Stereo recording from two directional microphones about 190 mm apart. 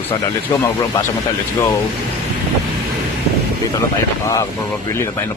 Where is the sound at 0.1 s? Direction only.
20° left (ahead or behind).